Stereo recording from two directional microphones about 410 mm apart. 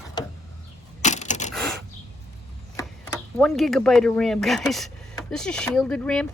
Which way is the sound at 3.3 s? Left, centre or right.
Centre.